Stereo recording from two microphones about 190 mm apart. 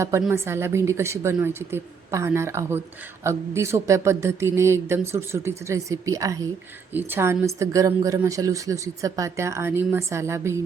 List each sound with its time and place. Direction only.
0.2 s a woman's voice: 10° right (ahead or behind)